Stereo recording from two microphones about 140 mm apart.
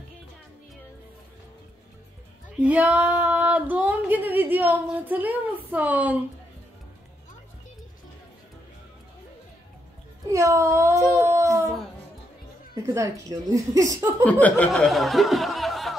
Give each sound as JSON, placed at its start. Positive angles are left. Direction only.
{"t": 2.6, "sound": "speech", "side_deg": -10}
{"t": 10.3, "sound": "a sound", "side_deg": -25}
{"t": 12.8, "sound": "a woman's voice", "side_deg": -20}
{"t": 14.2, "sound": "snicker", "side_deg": 10}